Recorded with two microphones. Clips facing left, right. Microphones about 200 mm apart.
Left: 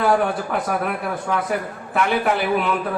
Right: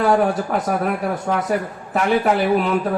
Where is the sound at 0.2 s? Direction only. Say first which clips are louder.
Right 3 dB; 40° right (ahead or behind).